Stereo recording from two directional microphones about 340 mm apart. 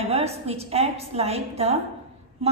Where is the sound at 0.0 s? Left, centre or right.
Centre.